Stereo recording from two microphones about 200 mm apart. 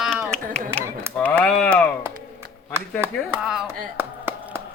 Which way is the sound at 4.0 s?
10° right (ahead or behind).